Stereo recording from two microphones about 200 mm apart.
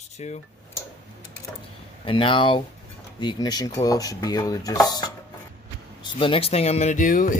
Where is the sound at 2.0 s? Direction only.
25° left (ahead or behind).